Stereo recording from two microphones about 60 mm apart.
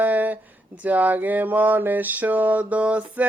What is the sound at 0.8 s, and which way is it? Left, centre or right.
Mantra, right.